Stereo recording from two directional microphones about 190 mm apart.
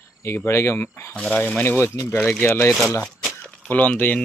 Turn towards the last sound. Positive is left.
turn(degrees=10)  # may be behind; listen again after turning